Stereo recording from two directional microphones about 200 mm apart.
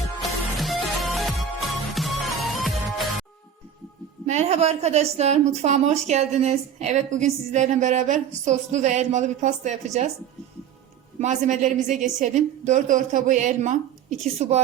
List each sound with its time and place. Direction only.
0.2 s music: centre (ahead or behind)
4.3 s a woman's voice: 30° right (ahead or behind)
11.2 s a woman's voice: 35° right (ahead or behind)